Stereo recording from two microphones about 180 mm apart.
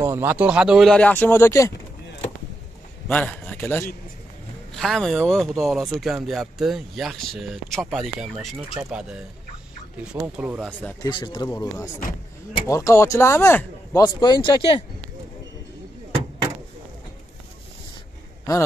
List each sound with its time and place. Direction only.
0.0 s speech: 15° right (ahead or behind); by 1.7 s 15° left (ahead or behind)
3.1 s a man's voice: 5° left (ahead or behind)
10.1 s speech: 10° right (ahead or behind)
11.0 s speech: 25° left (ahead or behind)